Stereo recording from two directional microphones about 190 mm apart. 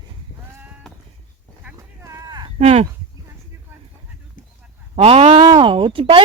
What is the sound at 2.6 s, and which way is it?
Speech, 35° right (ahead or behind).